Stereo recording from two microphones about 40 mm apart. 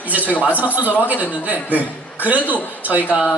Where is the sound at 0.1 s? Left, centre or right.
Right.